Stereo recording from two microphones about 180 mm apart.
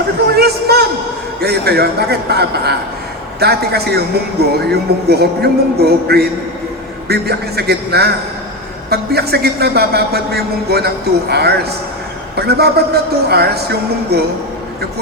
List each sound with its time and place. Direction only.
0.3 s a man's voice: 60° right (ahead or behind)